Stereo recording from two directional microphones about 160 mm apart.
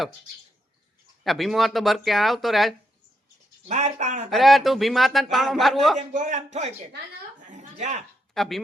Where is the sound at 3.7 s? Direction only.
45° right (ahead or behind).